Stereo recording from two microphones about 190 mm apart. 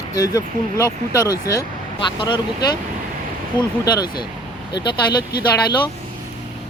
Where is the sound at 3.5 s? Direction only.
20° left (ahead or behind).